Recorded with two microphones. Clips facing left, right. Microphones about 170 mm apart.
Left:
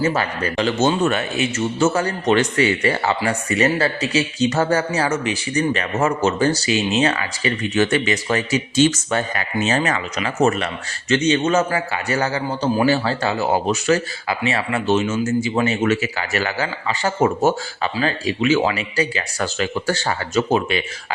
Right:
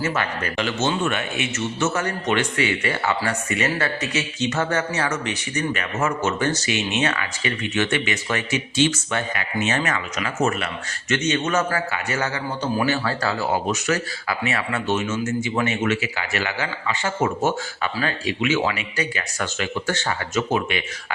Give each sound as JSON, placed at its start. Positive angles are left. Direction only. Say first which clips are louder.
{"t": 0.0, "sound": "speech", "louder": "left 4 dB", "side_deg": 35}